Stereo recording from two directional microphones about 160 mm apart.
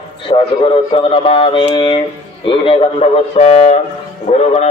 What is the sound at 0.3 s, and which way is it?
A man's voice, 35° left (ahead or behind).